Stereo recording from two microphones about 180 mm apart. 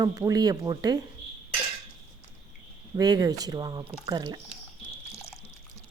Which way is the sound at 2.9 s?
20° right (ahead or behind).